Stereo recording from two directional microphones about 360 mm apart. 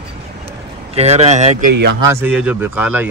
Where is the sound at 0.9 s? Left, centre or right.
Centre.